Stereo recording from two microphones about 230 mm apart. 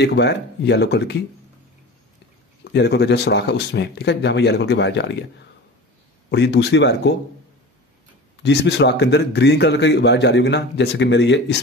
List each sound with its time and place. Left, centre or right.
0.0 s a man's voice: left
2.6 s a man's voice: left
6.3 s a man's voice: left
8.4 s a man's voice: left